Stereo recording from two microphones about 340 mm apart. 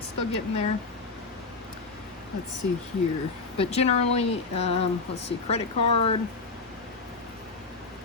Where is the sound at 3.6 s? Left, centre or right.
Centre.